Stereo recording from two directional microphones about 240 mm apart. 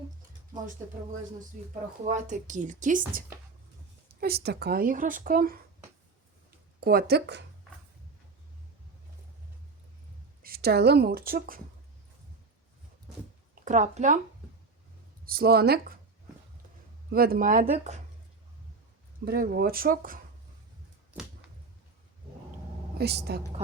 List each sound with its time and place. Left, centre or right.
2.0 s speech: right
6.7 s speech: right
10.4 s speech: right
13.7 s speech: right
15.2 s speech: right
17.1 s speech: right
19.2 s speech: right
23.0 s a woman's voice: right